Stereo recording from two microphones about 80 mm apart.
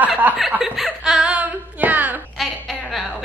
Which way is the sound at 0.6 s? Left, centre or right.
Centre.